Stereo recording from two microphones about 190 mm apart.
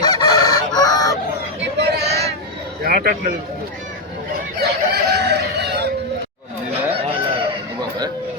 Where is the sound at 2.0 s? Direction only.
60° right (ahead or behind).